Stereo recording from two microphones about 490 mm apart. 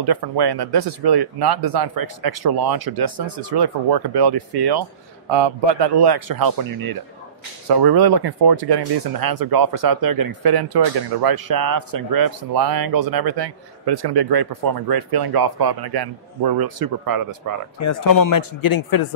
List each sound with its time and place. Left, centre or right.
0.0 s speech: right
17.7 s speech: left